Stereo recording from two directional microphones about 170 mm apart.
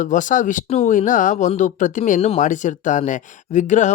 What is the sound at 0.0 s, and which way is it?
Speech, 50° left (ahead or behind).